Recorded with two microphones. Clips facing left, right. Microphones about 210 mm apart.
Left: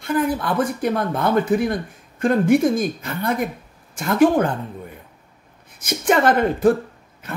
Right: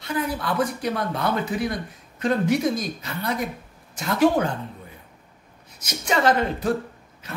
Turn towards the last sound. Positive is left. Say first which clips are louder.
# left 5 dB
turn(degrees=50)  # may be behind; listen again after turning